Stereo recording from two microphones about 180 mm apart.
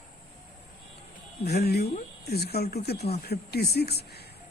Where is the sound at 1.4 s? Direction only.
60° left (ahead or behind).